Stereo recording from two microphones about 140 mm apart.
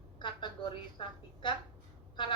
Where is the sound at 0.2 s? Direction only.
35° left (ahead or behind).